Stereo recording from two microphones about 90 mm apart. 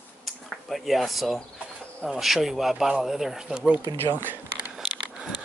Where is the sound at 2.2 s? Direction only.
Centre (ahead or behind).